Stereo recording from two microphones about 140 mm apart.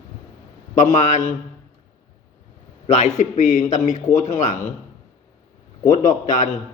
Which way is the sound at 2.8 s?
60° left (ahead or behind).